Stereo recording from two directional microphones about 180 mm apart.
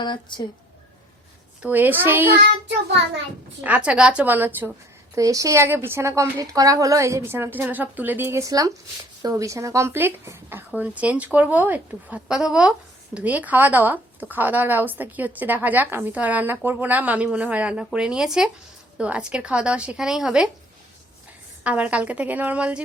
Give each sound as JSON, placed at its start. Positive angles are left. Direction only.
{"t": 0.0, "sound": "speech", "side_deg": 25}
{"t": 1.6, "sound": "speech", "side_deg": -10}
{"t": 3.6, "sound": "speech", "side_deg": -5}
{"t": 21.6, "sound": "speech", "side_deg": -10}